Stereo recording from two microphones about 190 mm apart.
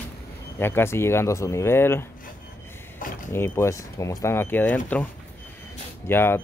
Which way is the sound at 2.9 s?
45° left (ahead or behind).